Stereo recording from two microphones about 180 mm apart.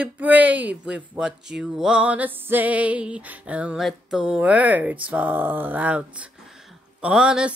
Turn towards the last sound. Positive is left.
turn(degrees=-5)  # may be behind; listen again after turning